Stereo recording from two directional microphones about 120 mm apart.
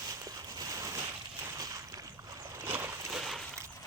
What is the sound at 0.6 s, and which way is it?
Boat, 30° right (ahead or behind).